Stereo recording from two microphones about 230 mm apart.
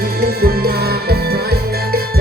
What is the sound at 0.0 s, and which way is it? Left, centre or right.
Music, right.